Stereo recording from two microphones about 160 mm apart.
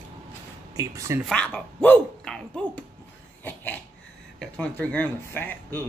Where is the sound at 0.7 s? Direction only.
20° right (ahead or behind).